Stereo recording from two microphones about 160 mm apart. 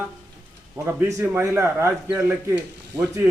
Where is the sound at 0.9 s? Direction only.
15° right (ahead or behind).